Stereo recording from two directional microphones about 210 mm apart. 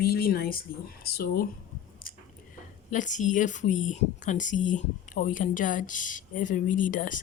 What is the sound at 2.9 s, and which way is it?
A woman's voice, 35° left (ahead or behind).